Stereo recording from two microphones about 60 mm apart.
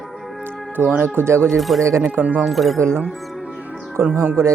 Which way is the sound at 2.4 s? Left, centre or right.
Centre.